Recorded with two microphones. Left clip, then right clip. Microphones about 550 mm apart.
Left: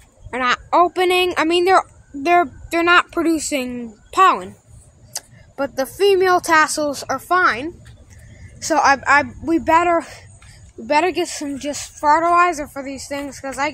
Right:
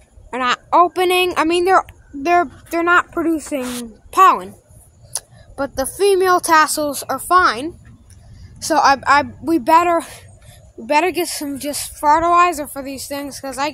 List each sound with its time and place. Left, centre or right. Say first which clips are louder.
0.3 s a woman's voice: right 1 dB; right
4.1 s a sound: right 2 dB; right
5.1 s a woman's voice: right 1 dB; right